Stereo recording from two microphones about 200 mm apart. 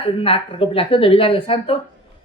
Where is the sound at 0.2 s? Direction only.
30° left (ahead or behind).